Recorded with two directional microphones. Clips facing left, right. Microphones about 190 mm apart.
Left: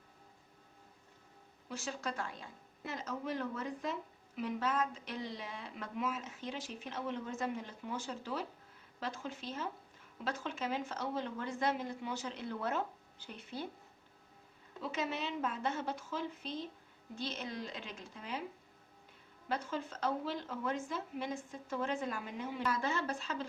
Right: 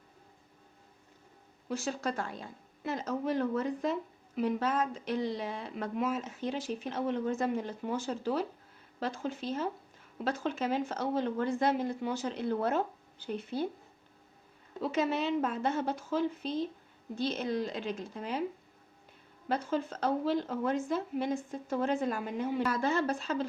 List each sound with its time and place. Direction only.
1.7 s a woman's voice: 35° right (ahead or behind)
7.9 s a woman's voice: 35° right (ahead or behind)
14.8 s a woman's voice: 40° right (ahead or behind)
19.5 s a woman's voice: 40° right (ahead or behind)